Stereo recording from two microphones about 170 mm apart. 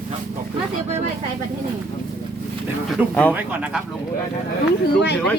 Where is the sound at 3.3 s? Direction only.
10° right (ahead or behind).